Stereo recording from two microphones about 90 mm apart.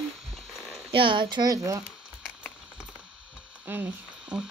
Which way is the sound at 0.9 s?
70° right (ahead or behind).